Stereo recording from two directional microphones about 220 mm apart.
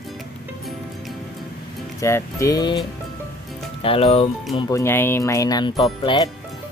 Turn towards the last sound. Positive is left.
turn(degrees=20)  # may be behind; listen again after turning